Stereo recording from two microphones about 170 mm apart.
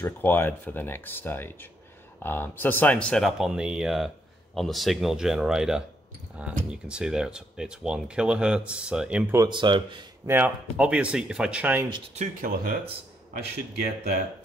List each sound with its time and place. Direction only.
0.0 s speech: 15° left (ahead or behind); by 9.4 s 10° right (ahead or behind)
9.4 s speech: 25° right (ahead or behind)
10.2 s speech: 10° right (ahead or behind)
12.2 s speech: 55° right (ahead or behind)